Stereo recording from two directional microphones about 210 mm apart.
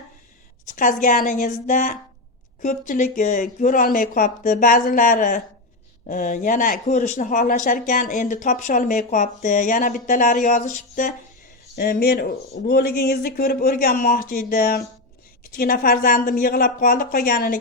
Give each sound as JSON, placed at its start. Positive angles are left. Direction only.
{"t": 0.7, "sound": "speech", "side_deg": 40}